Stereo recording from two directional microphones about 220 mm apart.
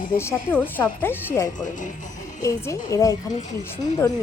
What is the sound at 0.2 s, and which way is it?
Speech, 10° left (ahead or behind).